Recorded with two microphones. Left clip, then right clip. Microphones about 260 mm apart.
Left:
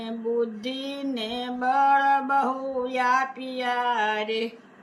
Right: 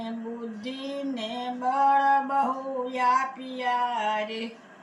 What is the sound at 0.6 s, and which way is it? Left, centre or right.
Music, centre.